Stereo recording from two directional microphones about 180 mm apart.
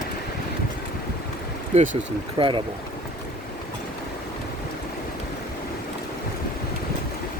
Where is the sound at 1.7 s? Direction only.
40° right (ahead or behind).